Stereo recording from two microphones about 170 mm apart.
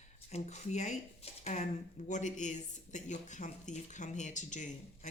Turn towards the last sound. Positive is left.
turn(degrees=45)  # may be behind; listen again after turning